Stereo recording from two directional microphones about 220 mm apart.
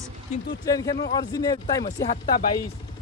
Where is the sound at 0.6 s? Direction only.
15° left (ahead or behind).